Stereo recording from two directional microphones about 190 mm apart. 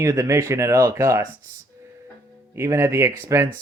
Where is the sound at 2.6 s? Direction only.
15° right (ahead or behind).